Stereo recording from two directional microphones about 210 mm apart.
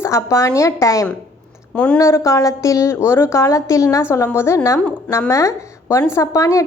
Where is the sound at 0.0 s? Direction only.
15° left (ahead or behind).